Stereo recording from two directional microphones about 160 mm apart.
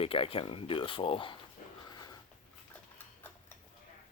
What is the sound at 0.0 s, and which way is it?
Speech, 35° left (ahead or behind).